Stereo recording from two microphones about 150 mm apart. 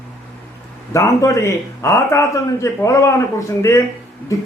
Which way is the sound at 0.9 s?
20° left (ahead or behind).